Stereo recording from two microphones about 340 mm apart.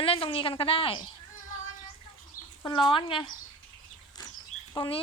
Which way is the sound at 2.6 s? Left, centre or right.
Centre.